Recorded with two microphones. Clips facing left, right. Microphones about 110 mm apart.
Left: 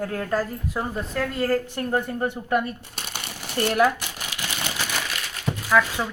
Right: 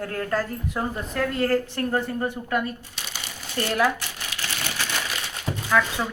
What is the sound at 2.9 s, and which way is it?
Coin, 55° left (ahead or behind).